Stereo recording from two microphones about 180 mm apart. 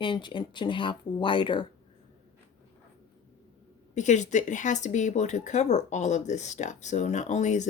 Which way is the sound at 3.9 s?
40° left (ahead or behind).